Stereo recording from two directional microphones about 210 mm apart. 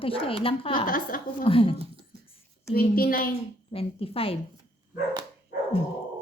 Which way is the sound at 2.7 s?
45° left (ahead or behind).